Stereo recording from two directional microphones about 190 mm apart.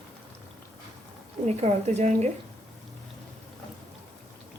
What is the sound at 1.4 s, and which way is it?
Speech, 35° right (ahead or behind).